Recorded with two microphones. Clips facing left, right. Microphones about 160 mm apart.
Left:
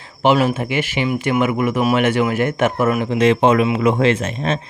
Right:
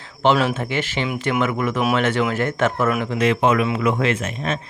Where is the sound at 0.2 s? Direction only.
10° left (ahead or behind); by 4.6 s 30° left (ahead or behind).